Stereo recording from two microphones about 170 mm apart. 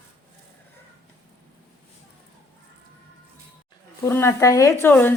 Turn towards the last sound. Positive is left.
turn(degrees=10)  # may be behind; listen again after turning